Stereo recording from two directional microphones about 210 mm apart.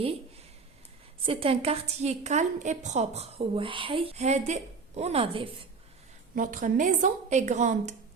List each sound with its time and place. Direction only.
1.2 s a woman's voice: 25° right (ahead or behind)
6.3 s a woman's voice: 40° right (ahead or behind)